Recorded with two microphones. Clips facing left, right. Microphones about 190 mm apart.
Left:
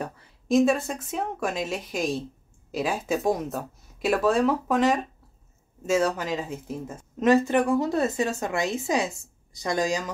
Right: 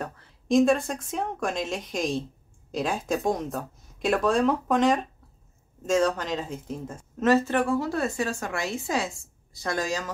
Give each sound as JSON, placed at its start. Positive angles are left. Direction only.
{"t": 0.0, "sound": "speech", "side_deg": 5}